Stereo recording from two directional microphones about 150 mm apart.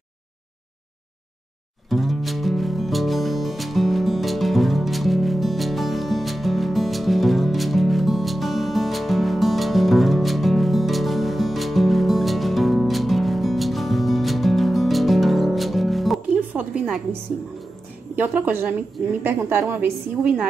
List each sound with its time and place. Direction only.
1.9 s music: centre (ahead or behind)
18.1 s a woman's voice: 10° right (ahead or behind)